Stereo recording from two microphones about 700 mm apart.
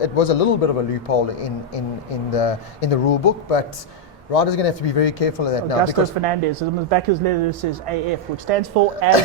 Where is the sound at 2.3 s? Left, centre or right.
Left.